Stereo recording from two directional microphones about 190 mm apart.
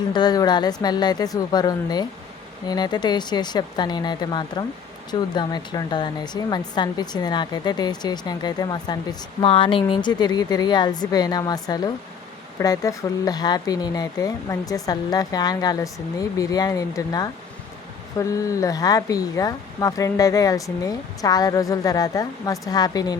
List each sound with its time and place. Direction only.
0.1 s speech: 20° left (ahead or behind)